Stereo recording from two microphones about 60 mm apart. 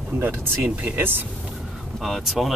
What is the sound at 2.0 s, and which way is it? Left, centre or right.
Speech, centre.